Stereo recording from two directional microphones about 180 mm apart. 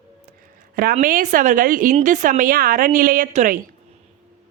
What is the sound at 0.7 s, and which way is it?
A woman's voice, 50° right (ahead or behind).